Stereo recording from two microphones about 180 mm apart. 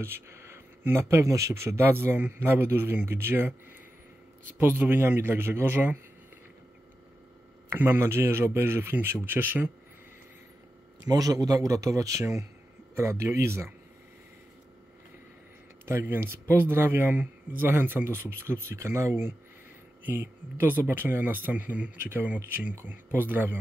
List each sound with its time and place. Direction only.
0.0 s speech: 15° right (ahead or behind)
4.6 s speech: 10° right (ahead or behind)
7.7 s speech: 10° right (ahead or behind)
11.1 s a man's voice: 20° right (ahead or behind)
15.8 s speech: 15° right (ahead or behind)